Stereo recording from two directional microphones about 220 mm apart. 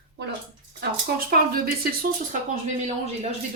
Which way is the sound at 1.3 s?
45° right (ahead or behind).